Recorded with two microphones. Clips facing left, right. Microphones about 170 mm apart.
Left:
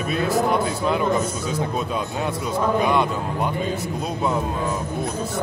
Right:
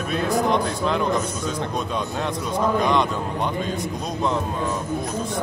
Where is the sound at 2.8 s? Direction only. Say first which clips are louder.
Left 1 dB; 5° left (ahead or behind).